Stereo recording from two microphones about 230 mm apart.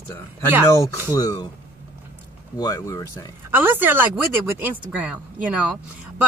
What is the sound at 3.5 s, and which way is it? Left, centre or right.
Speech, centre.